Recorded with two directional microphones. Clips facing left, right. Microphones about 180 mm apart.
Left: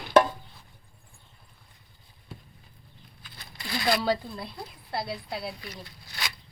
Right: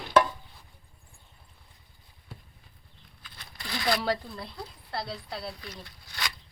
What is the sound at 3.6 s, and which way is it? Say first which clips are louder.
Speech: left 2 dB; 10° left (ahead or behind).